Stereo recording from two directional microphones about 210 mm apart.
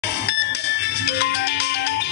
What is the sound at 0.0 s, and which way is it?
Music, 55° left (ahead or behind).